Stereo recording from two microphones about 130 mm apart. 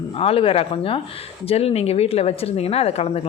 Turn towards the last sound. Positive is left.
turn(degrees=50)  # may be behind; listen again after turning